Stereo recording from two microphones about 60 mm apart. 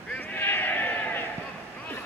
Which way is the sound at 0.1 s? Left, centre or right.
Left.